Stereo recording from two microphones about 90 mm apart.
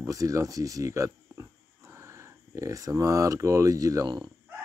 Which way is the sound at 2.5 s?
40° right (ahead or behind).